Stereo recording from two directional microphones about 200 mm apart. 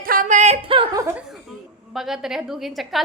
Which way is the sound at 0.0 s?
45° right (ahead or behind).